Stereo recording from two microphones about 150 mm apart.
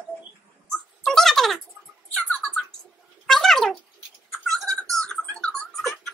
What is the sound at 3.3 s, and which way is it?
Cat, centre (ahead or behind).